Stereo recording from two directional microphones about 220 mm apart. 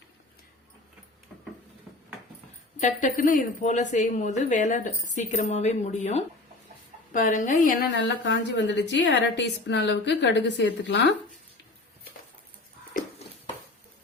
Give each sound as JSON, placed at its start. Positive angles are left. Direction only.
{"t": 2.8, "sound": "a woman's voice", "side_deg": 35}
{"t": 7.9, "sound": "a woman's voice", "side_deg": 55}